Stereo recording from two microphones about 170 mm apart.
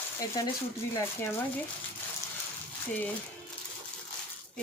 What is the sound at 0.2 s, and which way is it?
Speech, 20° left (ahead or behind).